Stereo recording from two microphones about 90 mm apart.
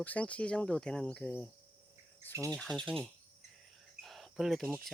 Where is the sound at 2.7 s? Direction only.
50° right (ahead or behind).